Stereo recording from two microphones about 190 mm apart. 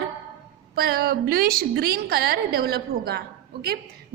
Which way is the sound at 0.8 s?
55° right (ahead or behind).